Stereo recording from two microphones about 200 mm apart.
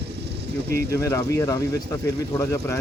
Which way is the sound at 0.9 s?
15° left (ahead or behind).